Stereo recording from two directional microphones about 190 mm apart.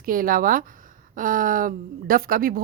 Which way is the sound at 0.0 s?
50° right (ahead or behind).